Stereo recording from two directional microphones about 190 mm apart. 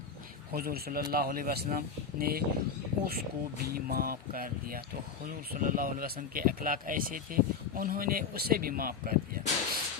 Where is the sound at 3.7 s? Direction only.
50° right (ahead or behind).